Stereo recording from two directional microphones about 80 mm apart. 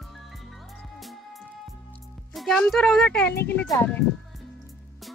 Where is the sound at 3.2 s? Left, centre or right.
Left.